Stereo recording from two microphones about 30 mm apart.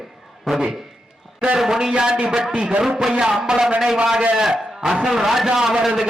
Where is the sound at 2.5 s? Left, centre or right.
Right.